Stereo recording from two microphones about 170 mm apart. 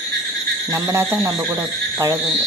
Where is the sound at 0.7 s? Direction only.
15° right (ahead or behind).